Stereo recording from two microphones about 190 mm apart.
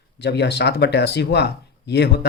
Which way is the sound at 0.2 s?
60° left (ahead or behind).